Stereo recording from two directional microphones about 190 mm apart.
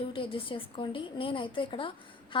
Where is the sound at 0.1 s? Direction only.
30° left (ahead or behind).